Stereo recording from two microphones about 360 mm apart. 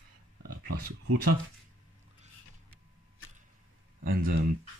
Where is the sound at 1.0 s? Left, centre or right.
Right.